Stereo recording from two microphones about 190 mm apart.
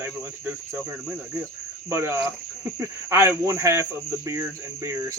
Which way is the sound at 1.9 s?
15° right (ahead or behind).